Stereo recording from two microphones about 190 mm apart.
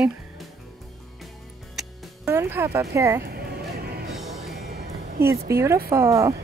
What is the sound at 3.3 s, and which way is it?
Music, 55° right (ahead or behind).